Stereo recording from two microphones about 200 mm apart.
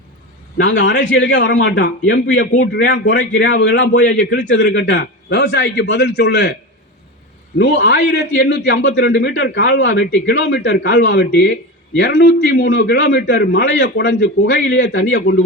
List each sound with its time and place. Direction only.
0.6 s a man's voice: 70° left (ahead or behind)
3.9 s a man's voice: 60° left (ahead or behind)
7.6 s a man's voice: 55° left (ahead or behind); by 15.4 s 75° left (ahead or behind)